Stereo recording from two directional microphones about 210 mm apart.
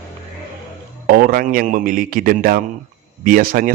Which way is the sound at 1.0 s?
45° right (ahead or behind).